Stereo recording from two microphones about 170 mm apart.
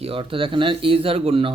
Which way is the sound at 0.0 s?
30° right (ahead or behind).